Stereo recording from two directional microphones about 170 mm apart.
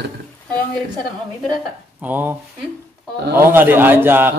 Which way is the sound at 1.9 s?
10° right (ahead or behind).